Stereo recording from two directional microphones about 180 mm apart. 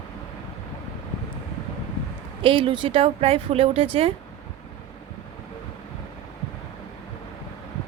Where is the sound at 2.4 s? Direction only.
30° right (ahead or behind).